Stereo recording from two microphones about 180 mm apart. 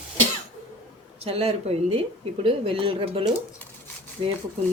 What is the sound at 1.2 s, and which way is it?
A woman's voice, 35° right (ahead or behind).